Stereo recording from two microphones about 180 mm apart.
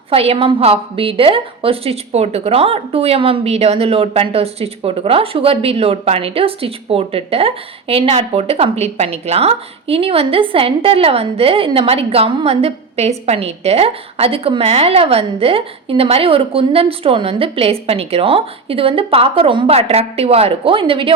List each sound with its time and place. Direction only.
0.1 s a woman's voice: 35° right (ahead or behind)